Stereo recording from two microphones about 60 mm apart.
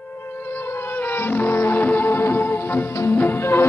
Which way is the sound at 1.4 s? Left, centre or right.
Left.